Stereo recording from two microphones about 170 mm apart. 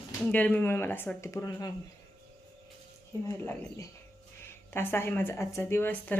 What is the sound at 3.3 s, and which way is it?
Speech, 15° left (ahead or behind).